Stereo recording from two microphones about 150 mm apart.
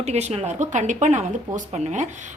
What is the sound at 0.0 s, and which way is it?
A woman's voice, 45° right (ahead or behind).